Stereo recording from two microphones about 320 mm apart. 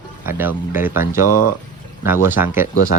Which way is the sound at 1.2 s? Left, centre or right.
Left.